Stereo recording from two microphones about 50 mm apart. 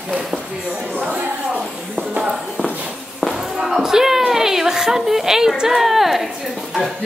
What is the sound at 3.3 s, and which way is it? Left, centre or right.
A woman's voice, centre.